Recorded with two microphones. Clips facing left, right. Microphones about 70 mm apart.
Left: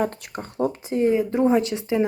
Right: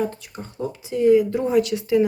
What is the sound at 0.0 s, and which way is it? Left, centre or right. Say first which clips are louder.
Speech: left 1 dB; left.